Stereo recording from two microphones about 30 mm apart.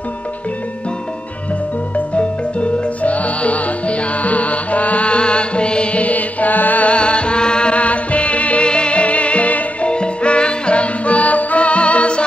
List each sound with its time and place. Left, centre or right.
3.0 s music: left
6.1 s mantra: left
7.0 s music: left
7.7 s music: left
8.6 s music: left
9.8 s music: left